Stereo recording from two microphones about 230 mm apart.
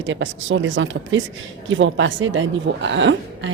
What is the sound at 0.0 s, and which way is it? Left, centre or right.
Speech, right.